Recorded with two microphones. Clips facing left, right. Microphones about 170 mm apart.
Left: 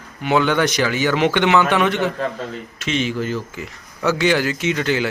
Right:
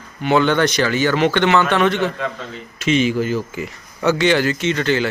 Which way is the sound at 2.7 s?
5° right (ahead or behind).